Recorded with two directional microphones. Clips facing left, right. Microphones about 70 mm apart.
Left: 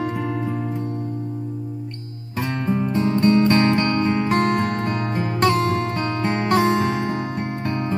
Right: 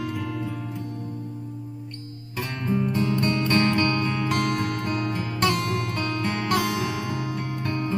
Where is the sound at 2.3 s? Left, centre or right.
Left.